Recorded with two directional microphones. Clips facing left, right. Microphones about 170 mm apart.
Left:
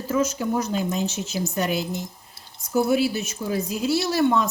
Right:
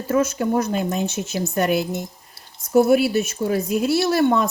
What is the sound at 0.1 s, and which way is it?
Speech, 60° right (ahead or behind).